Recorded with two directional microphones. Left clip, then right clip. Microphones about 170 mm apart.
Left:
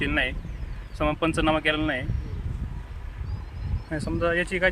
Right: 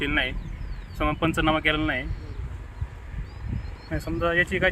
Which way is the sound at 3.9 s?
15° left (ahead or behind).